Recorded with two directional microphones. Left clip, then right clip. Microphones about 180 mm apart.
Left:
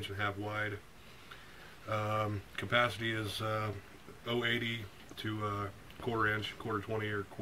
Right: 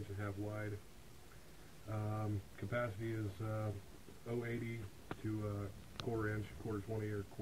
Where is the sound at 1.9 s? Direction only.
40° left (ahead or behind).